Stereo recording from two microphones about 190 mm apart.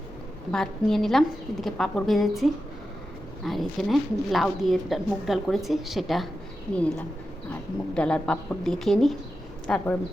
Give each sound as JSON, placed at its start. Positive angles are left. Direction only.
{"t": 0.5, "sound": "a woman's voice", "side_deg": 5}
{"t": 7.5, "sound": "a woman's voice", "side_deg": 5}